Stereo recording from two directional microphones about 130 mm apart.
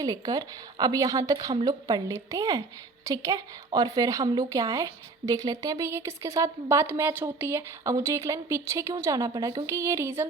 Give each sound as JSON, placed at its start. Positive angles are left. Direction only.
{"t": 0.0, "sound": "a woman's voice", "side_deg": -30}